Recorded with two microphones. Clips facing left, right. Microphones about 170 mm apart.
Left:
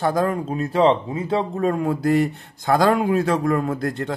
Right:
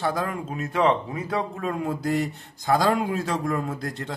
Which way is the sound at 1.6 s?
50° left (ahead or behind).